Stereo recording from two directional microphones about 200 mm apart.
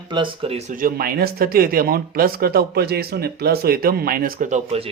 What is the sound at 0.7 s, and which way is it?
Speech, 45° right (ahead or behind).